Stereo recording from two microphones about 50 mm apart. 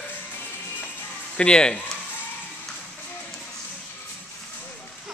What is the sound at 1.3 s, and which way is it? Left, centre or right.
Speech, centre.